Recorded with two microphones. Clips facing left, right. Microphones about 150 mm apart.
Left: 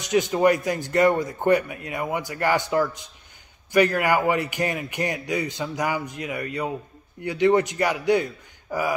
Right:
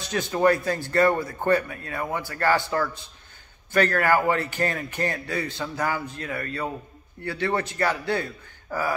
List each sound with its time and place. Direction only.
0.0 s speech: 15° left (ahead or behind)